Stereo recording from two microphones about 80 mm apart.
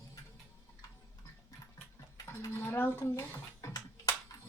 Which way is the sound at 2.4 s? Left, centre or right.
Left.